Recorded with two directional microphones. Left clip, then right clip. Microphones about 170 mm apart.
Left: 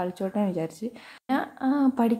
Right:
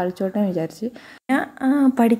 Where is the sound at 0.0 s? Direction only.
10° right (ahead or behind).